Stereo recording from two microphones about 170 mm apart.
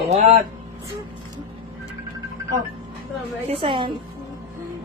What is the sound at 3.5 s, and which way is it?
Speech, 30° right (ahead or behind).